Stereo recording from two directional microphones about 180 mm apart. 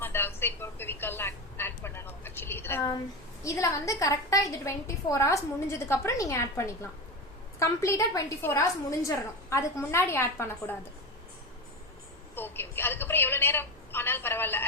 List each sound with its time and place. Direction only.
0.0 s a sound: 10° left (ahead or behind)
3.4 s a woman's voice: 15° left (ahead or behind)
12.4 s a woman's voice: 10° left (ahead or behind)